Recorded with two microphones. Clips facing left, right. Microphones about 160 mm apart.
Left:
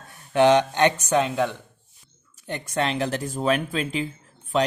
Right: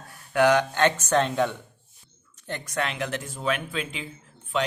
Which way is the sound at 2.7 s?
30° left (ahead or behind).